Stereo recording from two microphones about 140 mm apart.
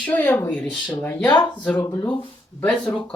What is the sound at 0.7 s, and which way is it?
Speech, 30° left (ahead or behind).